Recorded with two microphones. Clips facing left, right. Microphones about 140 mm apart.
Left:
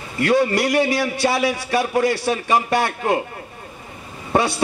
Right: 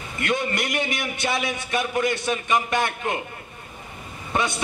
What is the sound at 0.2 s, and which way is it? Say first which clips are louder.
A man's voice: left 8 dB; 20° right (ahead or behind).